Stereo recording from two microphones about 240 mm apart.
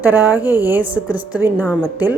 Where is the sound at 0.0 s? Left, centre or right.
Centre.